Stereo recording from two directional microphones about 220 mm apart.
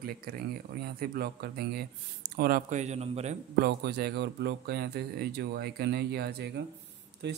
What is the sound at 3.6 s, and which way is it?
A man's voice, 50° right (ahead or behind).